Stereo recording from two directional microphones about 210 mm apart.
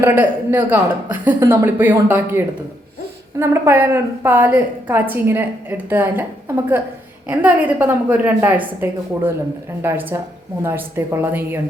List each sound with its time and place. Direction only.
0.0 s a woman's voice: 10° right (ahead or behind)
7.3 s a woman's voice: 5° right (ahead or behind)